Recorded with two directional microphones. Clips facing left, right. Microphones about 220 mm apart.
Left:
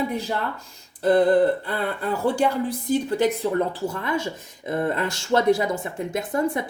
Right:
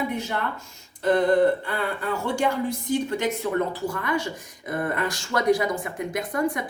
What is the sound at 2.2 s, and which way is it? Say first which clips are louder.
Speech: left 4 dB; 35° left (ahead or behind).